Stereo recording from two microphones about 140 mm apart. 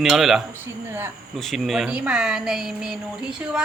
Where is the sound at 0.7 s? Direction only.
15° right (ahead or behind).